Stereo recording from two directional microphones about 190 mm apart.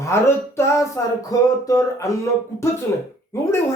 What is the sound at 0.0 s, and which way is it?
A man's voice, 15° left (ahead or behind).